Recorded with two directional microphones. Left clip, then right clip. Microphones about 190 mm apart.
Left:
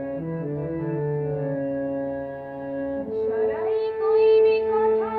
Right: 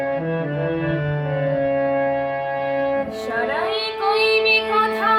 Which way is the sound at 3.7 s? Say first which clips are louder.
Right 2 dB; 20° right (ahead or behind).